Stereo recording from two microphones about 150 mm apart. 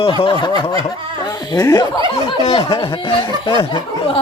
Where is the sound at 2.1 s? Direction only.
40° left (ahead or behind).